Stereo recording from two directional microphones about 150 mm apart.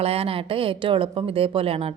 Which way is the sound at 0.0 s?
40° right (ahead or behind).